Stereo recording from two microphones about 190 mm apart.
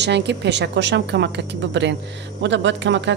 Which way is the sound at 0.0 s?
65° right (ahead or behind).